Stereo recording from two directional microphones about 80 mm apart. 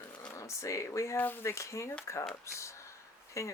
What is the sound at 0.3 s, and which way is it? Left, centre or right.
Speech, left.